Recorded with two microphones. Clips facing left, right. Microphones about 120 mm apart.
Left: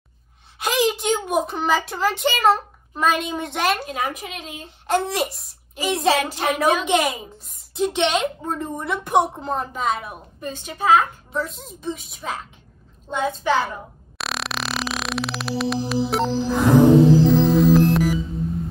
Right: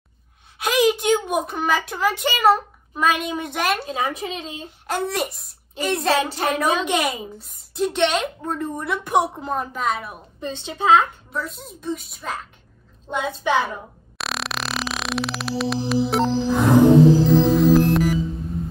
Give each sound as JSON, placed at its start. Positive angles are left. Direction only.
{"t": 0.6, "sound": "a child's voice", "side_deg": 0}
{"t": 3.8, "sound": "speech", "side_deg": -30}
{"t": 4.6, "sound": "a child's voice", "side_deg": 0}
{"t": 10.4, "sound": "speech", "side_deg": -25}
{"t": 11.3, "sound": "a child's voice", "side_deg": 0}
{"t": 13.1, "sound": "a child's voice", "side_deg": -15}
{"t": 14.1, "sound": "music", "side_deg": 0}
{"t": 17.3, "sound": "a child's voice", "side_deg": 0}